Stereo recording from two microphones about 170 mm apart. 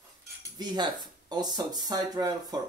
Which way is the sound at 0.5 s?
25° right (ahead or behind).